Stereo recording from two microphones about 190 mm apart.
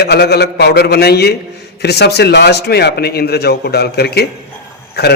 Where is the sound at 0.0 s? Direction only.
60° left (ahead or behind).